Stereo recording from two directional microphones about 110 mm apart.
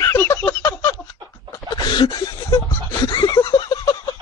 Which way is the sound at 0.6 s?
45° left (ahead or behind).